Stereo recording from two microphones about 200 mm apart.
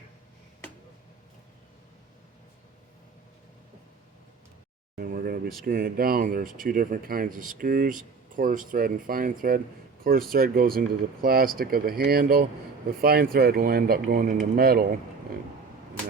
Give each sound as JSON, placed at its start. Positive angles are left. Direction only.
{"t": 4.9, "sound": "speech", "side_deg": -45}